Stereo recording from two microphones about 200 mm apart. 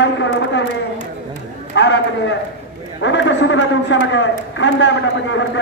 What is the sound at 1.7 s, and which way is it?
A man's voice, 60° left (ahead or behind).